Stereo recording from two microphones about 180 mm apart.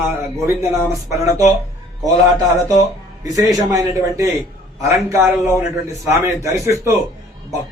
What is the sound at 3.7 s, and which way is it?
A man's voice, 20° right (ahead or behind).